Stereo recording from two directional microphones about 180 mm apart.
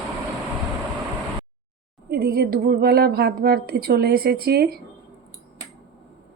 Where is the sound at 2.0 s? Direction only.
55° right (ahead or behind).